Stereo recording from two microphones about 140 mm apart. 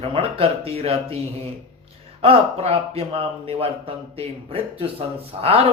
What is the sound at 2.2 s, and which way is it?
Speech, 45° right (ahead or behind).